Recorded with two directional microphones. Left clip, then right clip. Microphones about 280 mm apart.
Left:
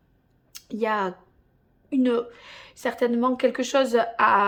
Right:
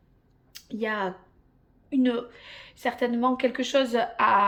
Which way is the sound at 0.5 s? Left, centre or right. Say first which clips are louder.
Left 4 dB; centre.